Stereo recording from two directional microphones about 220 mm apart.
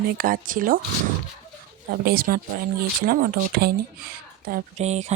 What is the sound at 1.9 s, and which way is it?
Speech, 40° right (ahead or behind).